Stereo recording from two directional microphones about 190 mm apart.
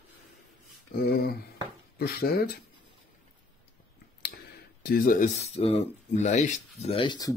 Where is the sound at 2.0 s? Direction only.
55° left (ahead or behind).